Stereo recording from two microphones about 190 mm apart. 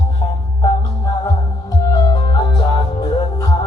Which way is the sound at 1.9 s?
20° left (ahead or behind).